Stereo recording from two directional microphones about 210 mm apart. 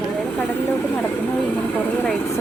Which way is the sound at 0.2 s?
10° left (ahead or behind).